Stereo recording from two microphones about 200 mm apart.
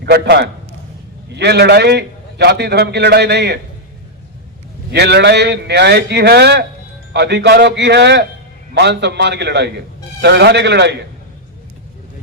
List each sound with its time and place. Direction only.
0.0 s a man's voice: 55° right (ahead or behind)
4.9 s a man's voice: 55° right (ahead or behind)